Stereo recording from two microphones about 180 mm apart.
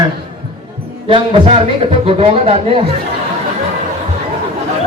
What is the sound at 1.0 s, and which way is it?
A man's voice, 35° right (ahead or behind).